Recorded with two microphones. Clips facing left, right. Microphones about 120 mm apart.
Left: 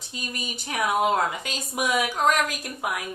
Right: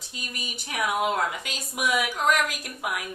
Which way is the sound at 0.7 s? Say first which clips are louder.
Left 3 dB; 30° left (ahead or behind).